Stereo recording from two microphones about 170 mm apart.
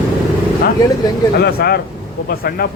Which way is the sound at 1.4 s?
70° left (ahead or behind).